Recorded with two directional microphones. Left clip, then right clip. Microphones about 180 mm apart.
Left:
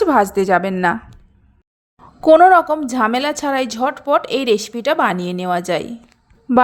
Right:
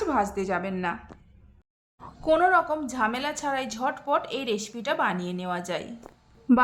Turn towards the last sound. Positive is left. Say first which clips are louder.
# left 8 dB
turn(degrees=0)  # may be behind; listen again after turning